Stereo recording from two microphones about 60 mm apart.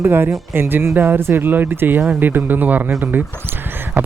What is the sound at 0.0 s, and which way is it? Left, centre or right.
Speech, right.